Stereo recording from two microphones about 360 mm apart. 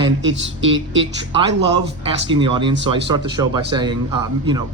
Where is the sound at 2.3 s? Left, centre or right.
Centre.